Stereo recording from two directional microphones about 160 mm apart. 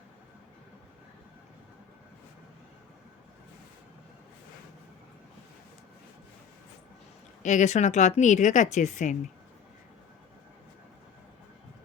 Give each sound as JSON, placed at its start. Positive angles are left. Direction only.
{"t": 7.4, "sound": "speech", "side_deg": 45}